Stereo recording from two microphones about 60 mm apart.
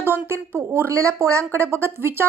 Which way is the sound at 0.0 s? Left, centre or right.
Right.